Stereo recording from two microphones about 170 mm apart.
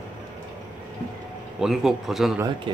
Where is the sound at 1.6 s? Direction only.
Centre (ahead or behind).